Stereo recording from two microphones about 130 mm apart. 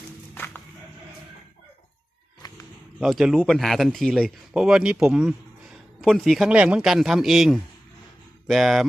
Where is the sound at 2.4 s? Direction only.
30° left (ahead or behind).